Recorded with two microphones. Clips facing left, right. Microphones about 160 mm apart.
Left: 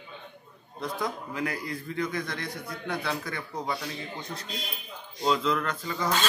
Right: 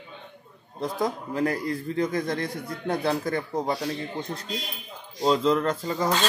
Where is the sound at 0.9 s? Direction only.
40° right (ahead or behind).